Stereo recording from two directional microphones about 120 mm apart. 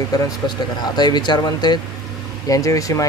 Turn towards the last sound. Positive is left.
turn(degrees=30)  # may be behind; listen again after turning